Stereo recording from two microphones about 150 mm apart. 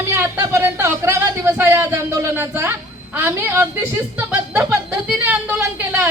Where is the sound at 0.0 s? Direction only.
15° right (ahead or behind).